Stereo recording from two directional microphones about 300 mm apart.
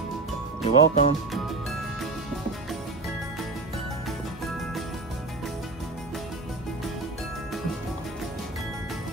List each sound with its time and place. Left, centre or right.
0.7 s speech: left